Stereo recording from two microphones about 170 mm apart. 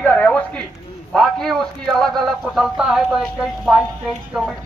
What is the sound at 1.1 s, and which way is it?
A man's voice, 5° left (ahead or behind).